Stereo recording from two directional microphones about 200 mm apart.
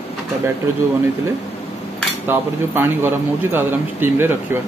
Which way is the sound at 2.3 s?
10° right (ahead or behind).